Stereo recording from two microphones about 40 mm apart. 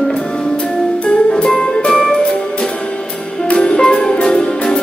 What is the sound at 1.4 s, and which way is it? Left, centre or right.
Music, centre.